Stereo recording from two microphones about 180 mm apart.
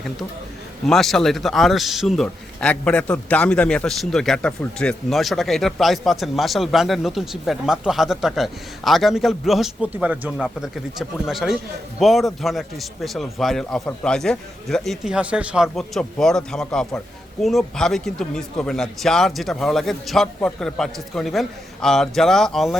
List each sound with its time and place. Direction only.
0.9 s speech: centre (ahead or behind)